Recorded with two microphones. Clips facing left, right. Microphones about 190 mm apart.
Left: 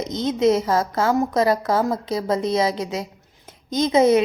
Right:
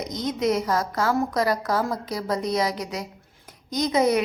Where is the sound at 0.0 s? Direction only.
25° left (ahead or behind).